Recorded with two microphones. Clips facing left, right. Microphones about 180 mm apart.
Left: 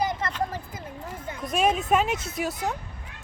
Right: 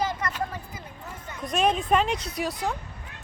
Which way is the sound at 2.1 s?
50° left (ahead or behind).